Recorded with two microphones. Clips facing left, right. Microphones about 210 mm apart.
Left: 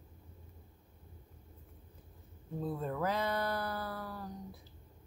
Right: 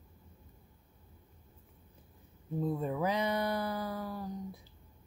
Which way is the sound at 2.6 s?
15° right (ahead or behind).